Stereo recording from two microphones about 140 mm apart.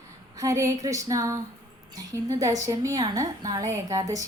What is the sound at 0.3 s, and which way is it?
A woman's voice, 20° right (ahead or behind).